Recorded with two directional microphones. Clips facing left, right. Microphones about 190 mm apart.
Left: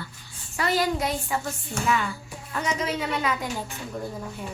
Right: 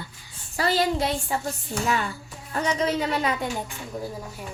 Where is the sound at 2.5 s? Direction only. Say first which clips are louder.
Right 3 dB; 35° right (ahead or behind).